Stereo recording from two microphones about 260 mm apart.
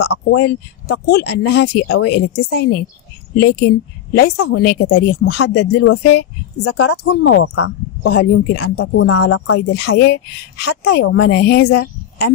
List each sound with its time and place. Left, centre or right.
0.0 s a woman's voice: left
7.5 s a woman's voice: left